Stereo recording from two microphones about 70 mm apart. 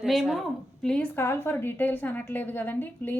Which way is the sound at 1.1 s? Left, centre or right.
Left.